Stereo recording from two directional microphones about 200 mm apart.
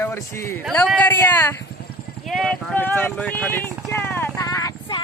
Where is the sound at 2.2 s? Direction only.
Centre (ahead or behind).